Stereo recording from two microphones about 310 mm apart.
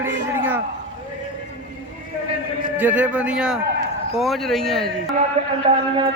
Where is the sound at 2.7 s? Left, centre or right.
Centre.